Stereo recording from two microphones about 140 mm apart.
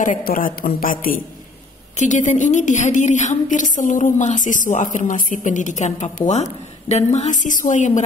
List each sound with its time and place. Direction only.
0.0 s a woman's voice: 75° left (ahead or behind)
2.0 s a woman's voice: 60° left (ahead or behind)